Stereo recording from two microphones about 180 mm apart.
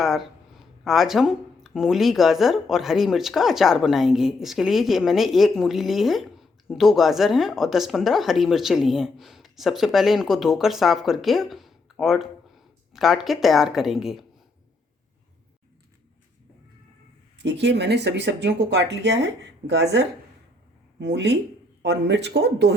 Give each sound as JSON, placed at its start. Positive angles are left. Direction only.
{"t": 0.0, "sound": "speech", "side_deg": 0}
{"t": 17.3, "sound": "speech", "side_deg": -75}